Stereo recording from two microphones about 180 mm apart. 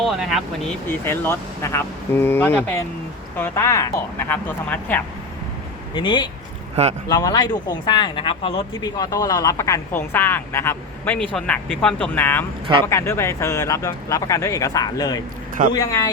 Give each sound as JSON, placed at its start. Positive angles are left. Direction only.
{"t": 0.0, "sound": "speech", "side_deg": 0}
{"t": 5.9, "sound": "speech", "side_deg": 25}